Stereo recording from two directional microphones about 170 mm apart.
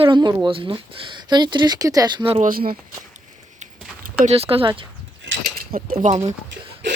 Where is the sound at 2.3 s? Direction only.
55° right (ahead or behind).